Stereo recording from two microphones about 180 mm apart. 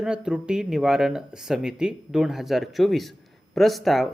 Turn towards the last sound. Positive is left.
turn(degrees=0)  # may be behind; listen again after turning